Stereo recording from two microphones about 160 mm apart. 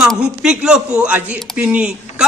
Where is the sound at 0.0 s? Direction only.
5° right (ahead or behind).